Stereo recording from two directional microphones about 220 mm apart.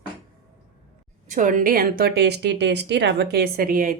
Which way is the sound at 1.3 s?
35° right (ahead or behind).